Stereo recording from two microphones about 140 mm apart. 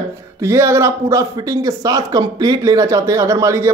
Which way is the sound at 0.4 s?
20° right (ahead or behind).